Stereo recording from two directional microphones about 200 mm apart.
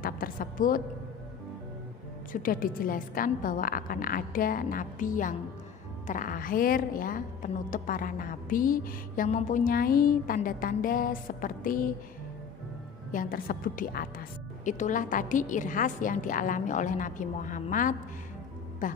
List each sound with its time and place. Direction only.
0.0 s a woman's voice: 45° left (ahead or behind)
2.3 s a woman's voice: 45° left (ahead or behind)
13.1 s a woman's voice: 45° left (ahead or behind)